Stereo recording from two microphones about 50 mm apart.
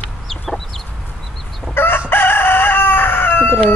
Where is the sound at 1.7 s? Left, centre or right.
Left.